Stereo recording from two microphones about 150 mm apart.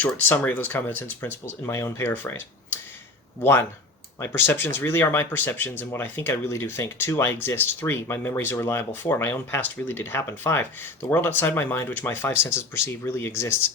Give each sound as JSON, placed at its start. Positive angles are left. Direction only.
{"t": 0.0, "sound": "speech", "side_deg": 10}